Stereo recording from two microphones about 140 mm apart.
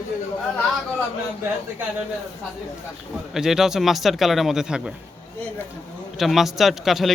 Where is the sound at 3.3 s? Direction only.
5° right (ahead or behind).